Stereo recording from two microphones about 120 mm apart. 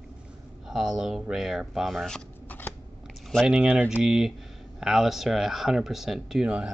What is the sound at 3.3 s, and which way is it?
Speech, 5° right (ahead or behind).